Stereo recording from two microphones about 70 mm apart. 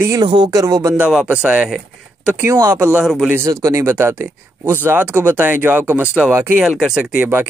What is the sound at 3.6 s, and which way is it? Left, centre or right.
Speech, right.